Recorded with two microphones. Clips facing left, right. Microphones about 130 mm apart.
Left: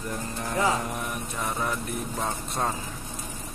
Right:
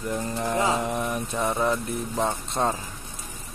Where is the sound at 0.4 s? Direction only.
25° right (ahead or behind).